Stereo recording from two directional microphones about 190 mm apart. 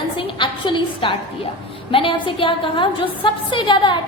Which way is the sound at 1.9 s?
25° left (ahead or behind).